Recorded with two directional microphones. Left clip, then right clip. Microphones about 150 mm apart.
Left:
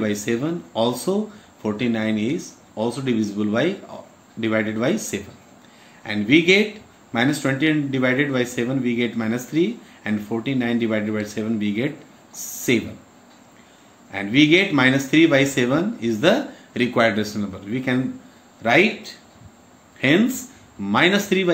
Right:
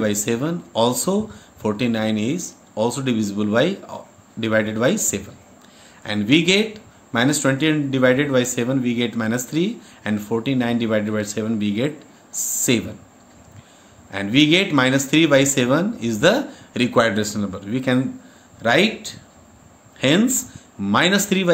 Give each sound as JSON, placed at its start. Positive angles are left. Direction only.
{"t": 0.0, "sound": "speech", "side_deg": -90}
{"t": 14.1, "sound": "speech", "side_deg": -90}
{"t": 20.8, "sound": "speech", "side_deg": -90}